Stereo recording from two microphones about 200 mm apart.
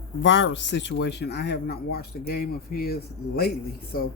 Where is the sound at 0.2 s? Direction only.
65° left (ahead or behind); by 4.1 s 45° left (ahead or behind).